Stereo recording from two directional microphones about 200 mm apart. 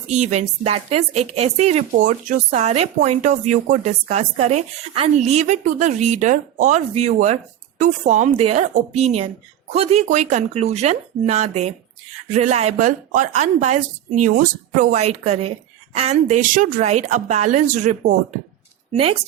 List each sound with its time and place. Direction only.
0.1 s a woman's voice: 35° right (ahead or behind)